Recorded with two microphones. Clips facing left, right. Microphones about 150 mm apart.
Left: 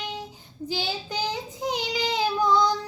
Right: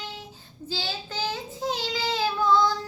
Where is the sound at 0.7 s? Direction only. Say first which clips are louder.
Left 3 dB; 15° left (ahead or behind).